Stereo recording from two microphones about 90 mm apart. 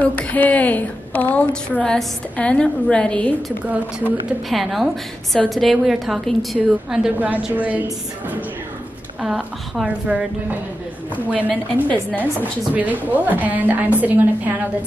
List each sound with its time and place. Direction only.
0.0 s a woman's voice: 15° left (ahead or behind)
3.6 s a woman's voice: 15° right (ahead or behind)
4.5 s a woman's voice: centre (ahead or behind)
7.2 s a woman's voice: 20° right (ahead or behind)
9.2 s a woman's voice: 10° right (ahead or behind)
11.7 s a woman's voice: 15° left (ahead or behind)
12.2 s a woman's voice: 20° right (ahead or behind)